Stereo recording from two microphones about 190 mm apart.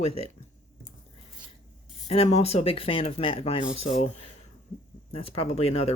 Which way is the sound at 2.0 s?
35° left (ahead or behind).